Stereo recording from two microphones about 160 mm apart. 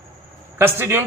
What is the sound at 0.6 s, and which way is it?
Speech, 15° right (ahead or behind).